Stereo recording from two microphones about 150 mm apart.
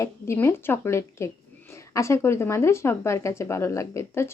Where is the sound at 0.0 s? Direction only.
20° left (ahead or behind).